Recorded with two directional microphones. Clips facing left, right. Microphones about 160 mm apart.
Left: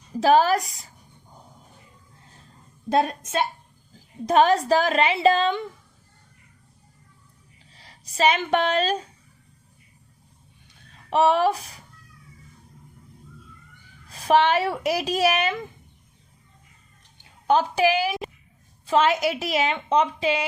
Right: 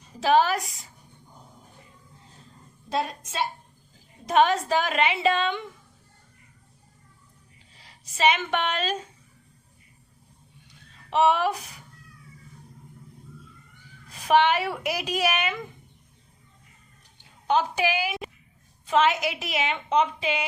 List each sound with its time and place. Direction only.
0.2 s a woman's voice: 40° left (ahead or behind)
2.9 s a woman's voice: 55° left (ahead or behind)
4.3 s a woman's voice: 40° left (ahead or behind)
7.8 s speech: 35° left (ahead or behind)
11.1 s a woman's voice: 40° left (ahead or behind)
14.1 s a woman's voice: 35° left (ahead or behind)
17.4 s a woman's voice: 40° left (ahead or behind)